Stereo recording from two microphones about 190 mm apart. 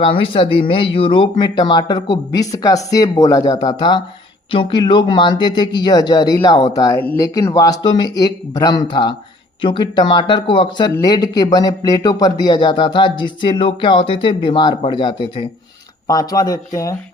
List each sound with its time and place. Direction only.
0.0 s a man's voice: 25° left (ahead or behind)